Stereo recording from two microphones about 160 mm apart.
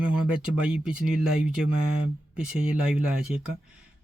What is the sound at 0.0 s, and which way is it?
Speech, 5° right (ahead or behind).